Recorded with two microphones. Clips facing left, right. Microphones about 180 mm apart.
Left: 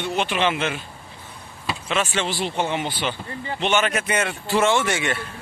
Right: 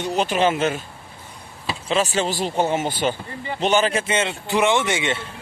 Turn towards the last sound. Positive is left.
turn(degrees=-20)  # may be behind; listen again after turning